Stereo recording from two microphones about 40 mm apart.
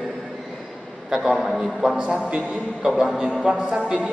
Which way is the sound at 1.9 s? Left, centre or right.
Right.